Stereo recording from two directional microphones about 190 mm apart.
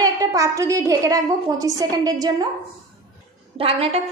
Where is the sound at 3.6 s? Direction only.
30° right (ahead or behind).